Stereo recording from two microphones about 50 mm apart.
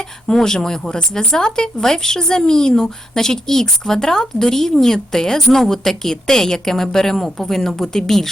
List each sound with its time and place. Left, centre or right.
0.3 s speech: centre